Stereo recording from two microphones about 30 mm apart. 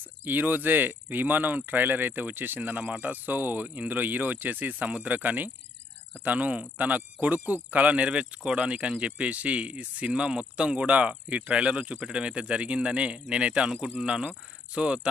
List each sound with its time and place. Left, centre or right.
0.3 s speech: right
3.6 s speech: right
4.8 s speech: right
6.2 s speech: right
7.7 s speech: right
10.9 s speech: right
11.5 s speech: right